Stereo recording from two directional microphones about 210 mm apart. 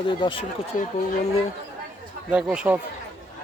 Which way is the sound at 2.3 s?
5° right (ahead or behind).